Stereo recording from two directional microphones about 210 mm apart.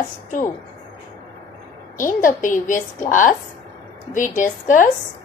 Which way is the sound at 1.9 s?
40° left (ahead or behind).